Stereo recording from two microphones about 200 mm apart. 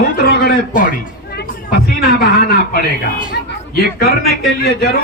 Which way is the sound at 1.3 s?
50° left (ahead or behind).